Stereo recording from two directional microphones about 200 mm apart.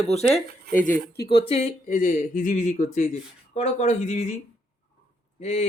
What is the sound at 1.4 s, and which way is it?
Speech, 30° left (ahead or behind).